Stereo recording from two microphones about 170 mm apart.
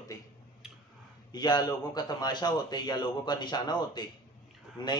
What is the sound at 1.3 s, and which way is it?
Speech, 25° left (ahead or behind).